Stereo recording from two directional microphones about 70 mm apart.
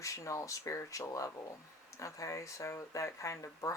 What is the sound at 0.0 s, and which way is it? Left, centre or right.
Speech, left.